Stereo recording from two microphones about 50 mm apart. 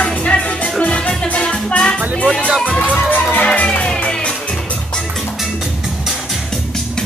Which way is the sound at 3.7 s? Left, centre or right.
Left.